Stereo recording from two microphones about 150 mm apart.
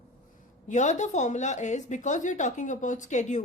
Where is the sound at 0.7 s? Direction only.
55° left (ahead or behind).